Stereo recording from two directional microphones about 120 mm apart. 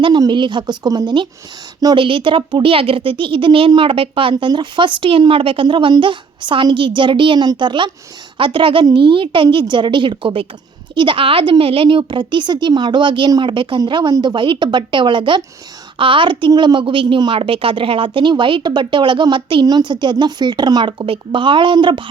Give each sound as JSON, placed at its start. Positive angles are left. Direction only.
{"t": 0.0, "sound": "a woman's voice", "side_deg": -40}
{"t": 2.0, "sound": "a woman's voice", "side_deg": -45}